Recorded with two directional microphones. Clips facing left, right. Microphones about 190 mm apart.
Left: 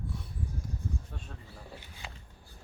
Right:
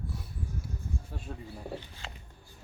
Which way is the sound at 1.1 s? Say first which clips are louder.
Right 5 dB; 10° right (ahead or behind).